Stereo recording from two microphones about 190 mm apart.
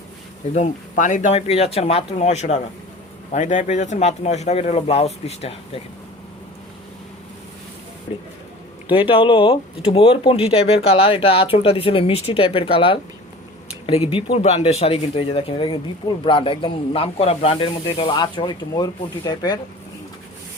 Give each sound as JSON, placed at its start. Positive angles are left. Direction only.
{"t": 0.5, "sound": "speech", "side_deg": 40}
{"t": 8.1, "sound": "speech", "side_deg": 30}